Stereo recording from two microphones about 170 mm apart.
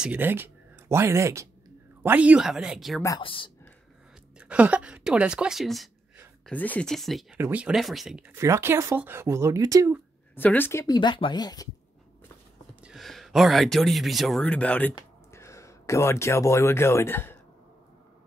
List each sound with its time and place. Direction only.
0.0 s speech: 10° right (ahead or behind)
3.2 s speech: 30° left (ahead or behind)
4.4 s speech: 5° right (ahead or behind)
7.3 s speech: 10° right (ahead or behind)
8.4 s speech: 15° right (ahead or behind)
10.3 s speech: 10° left (ahead or behind)
11.0 s speech: 25° left (ahead or behind)
12.8 s speech: centre (ahead or behind)